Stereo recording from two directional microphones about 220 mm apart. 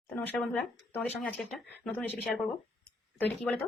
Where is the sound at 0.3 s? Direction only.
5° left (ahead or behind).